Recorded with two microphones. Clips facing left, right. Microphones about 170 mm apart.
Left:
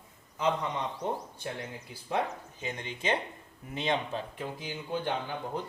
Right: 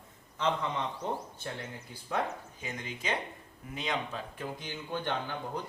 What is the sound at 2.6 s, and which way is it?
Speech, 30° left (ahead or behind).